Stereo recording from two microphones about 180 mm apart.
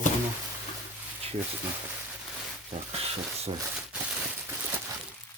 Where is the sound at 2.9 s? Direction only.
35° right (ahead or behind).